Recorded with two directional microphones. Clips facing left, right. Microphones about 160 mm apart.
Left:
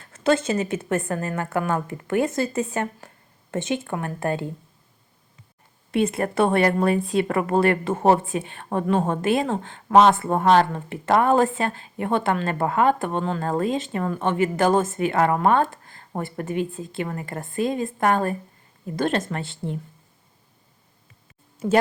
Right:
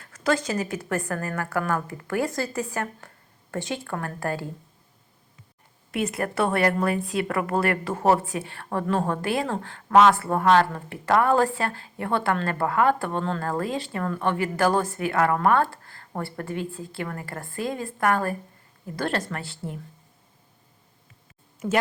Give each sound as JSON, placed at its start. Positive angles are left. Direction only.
{"t": 0.1, "sound": "speech", "side_deg": 25}
{"t": 5.9, "sound": "speech", "side_deg": 25}